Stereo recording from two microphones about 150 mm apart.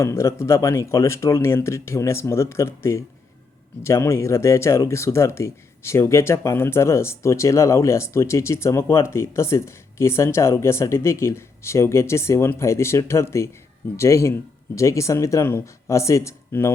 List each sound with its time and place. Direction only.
0.0 s speech: 20° left (ahead or behind)